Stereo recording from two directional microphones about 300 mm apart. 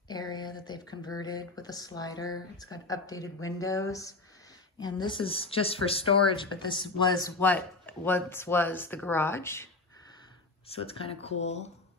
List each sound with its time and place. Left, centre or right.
0.1 s a sound: centre
2.5 s speech: centre
10.7 s speech: centre